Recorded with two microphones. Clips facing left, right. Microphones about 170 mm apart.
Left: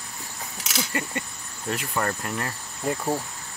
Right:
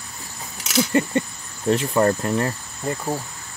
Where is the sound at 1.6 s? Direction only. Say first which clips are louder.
Right 9 dB; 30° right (ahead or behind).